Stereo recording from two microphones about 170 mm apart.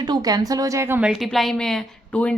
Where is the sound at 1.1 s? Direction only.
Centre (ahead or behind).